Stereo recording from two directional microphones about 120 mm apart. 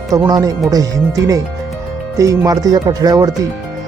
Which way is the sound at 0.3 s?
30° right (ahead or behind).